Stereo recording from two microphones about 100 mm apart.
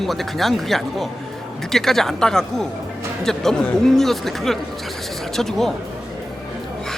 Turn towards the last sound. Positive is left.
turn(degrees=5)  # may be behind; listen again after turning